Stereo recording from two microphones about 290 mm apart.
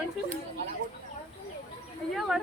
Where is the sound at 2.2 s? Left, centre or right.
Centre.